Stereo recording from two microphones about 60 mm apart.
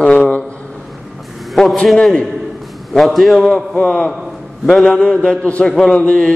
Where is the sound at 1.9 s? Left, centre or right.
Centre.